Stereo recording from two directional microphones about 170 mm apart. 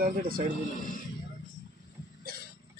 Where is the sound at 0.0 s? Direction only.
55° right (ahead or behind).